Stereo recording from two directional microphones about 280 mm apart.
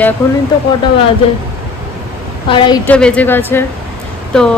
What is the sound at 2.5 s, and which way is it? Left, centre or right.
Speech, centre.